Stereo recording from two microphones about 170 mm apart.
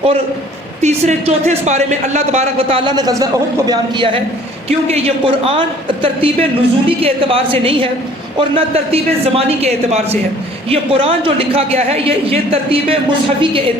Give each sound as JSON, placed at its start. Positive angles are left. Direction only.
{"t": 0.8, "sound": "a man's voice", "side_deg": -40}